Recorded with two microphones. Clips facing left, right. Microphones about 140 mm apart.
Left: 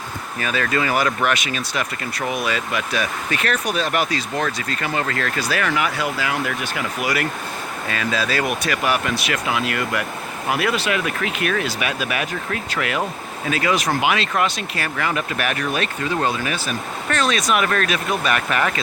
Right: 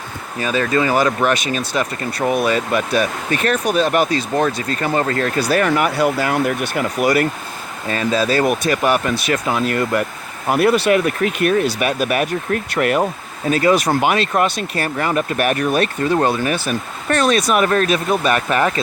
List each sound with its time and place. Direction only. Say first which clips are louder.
0.3 s speech: right 5 dB; 25° right (ahead or behind)